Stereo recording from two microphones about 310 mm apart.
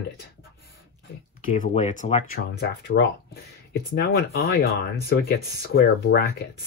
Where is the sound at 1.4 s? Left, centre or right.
Left.